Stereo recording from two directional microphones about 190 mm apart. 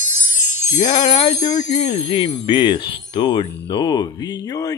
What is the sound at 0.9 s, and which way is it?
Speech, 30° left (ahead or behind).